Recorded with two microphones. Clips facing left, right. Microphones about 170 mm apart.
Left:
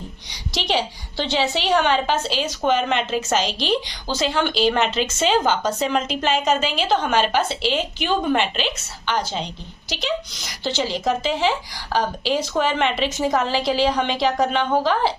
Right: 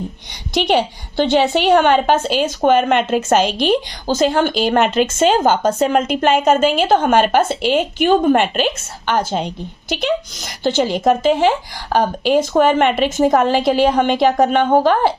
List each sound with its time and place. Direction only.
0.5 s a woman's voice: 55° right (ahead or behind)